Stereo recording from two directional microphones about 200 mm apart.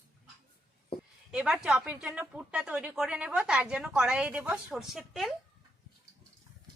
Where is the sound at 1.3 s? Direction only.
5° right (ahead or behind).